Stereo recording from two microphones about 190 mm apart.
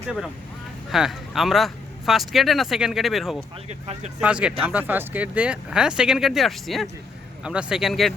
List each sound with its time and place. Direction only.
0.9 s speech: centre (ahead or behind)
3.7 s speech: 35° right (ahead or behind)
4.2 s speech: 5° right (ahead or behind)